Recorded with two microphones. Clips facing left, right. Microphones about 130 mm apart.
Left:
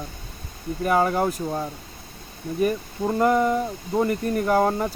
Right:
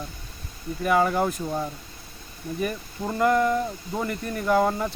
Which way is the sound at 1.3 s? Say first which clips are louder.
Left 1 dB; 10° left (ahead or behind).